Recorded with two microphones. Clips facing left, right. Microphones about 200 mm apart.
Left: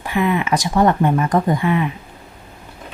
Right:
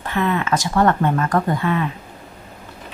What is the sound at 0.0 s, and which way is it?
Speech, 10° left (ahead or behind).